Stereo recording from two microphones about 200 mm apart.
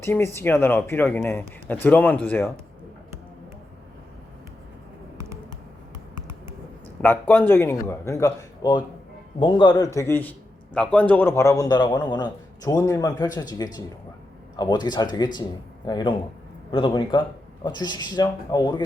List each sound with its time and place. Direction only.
0.0 s speech: 10° left (ahead or behind)
7.0 s a man's voice: 10° left (ahead or behind)